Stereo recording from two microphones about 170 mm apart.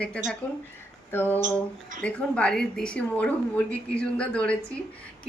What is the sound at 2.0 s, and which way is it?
A woman's voice, 5° left (ahead or behind).